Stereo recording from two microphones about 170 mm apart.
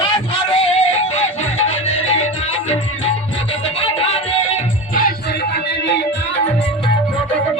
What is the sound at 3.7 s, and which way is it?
Music, 35° left (ahead or behind).